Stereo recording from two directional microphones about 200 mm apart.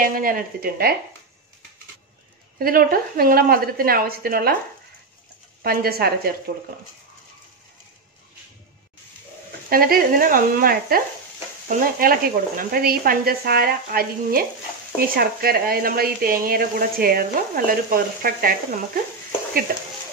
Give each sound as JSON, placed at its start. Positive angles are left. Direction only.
{"t": 0.0, "sound": "speech", "side_deg": -45}
{"t": 2.6, "sound": "speech", "side_deg": -45}
{"t": 5.6, "sound": "speech", "side_deg": -50}
{"t": 9.7, "sound": "speech", "side_deg": -45}